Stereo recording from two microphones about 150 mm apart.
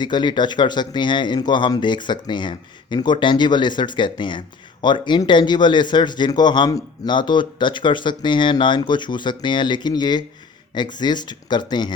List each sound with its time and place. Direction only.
0.0 s a man's voice: 30° left (ahead or behind)